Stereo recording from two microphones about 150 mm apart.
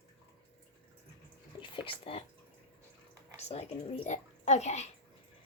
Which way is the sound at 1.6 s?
35° left (ahead or behind).